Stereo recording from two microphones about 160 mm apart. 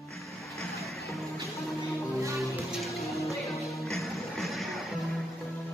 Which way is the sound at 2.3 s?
Centre (ahead or behind).